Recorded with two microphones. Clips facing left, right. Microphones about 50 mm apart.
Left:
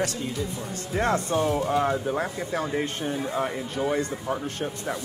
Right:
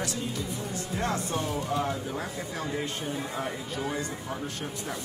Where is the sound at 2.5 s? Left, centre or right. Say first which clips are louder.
Left 5 dB; left.